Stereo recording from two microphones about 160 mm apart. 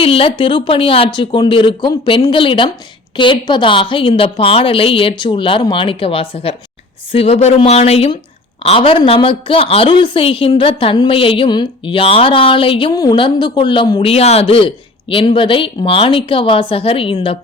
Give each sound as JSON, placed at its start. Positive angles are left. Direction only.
{"t": 0.0, "sound": "a woman's voice", "side_deg": 35}
{"t": 14.0, "sound": "a woman's voice", "side_deg": 40}